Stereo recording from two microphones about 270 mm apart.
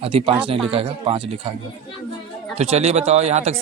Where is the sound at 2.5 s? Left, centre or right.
Right.